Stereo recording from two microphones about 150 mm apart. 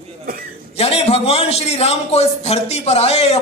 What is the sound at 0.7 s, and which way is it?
A man's voice, 40° left (ahead or behind).